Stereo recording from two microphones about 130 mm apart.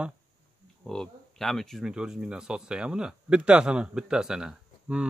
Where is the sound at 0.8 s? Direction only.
5° left (ahead or behind).